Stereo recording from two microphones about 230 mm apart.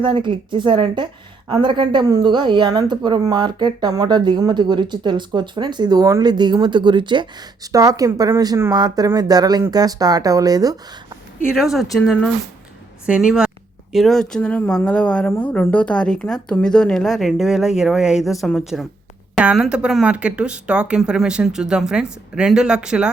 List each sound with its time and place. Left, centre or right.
0.0 s a woman's voice: right
11.4 s speech: centre